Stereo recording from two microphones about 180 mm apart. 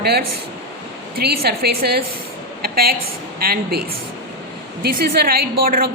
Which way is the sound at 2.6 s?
60° right (ahead or behind).